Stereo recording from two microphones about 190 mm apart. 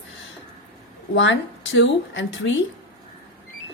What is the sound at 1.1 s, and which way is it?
A woman's voice, 80° left.